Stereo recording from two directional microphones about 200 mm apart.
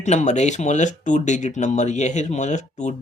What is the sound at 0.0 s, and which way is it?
Speech, 35° left (ahead or behind).